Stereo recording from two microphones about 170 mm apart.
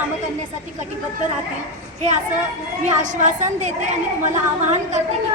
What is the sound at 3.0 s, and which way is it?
Speech, 45° right (ahead or behind).